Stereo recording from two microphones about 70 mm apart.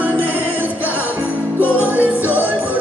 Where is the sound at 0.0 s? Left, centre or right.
Right.